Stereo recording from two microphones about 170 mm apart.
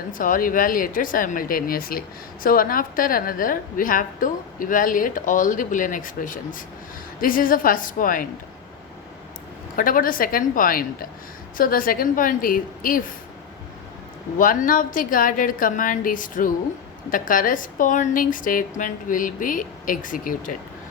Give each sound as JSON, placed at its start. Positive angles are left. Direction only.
{"t": 0.1, "sound": "a woman's voice", "side_deg": 55}
{"t": 9.7, "sound": "a woman's voice", "side_deg": 55}
{"t": 14.3, "sound": "speech", "side_deg": 50}